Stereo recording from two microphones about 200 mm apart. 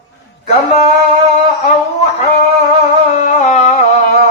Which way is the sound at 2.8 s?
35° left (ahead or behind).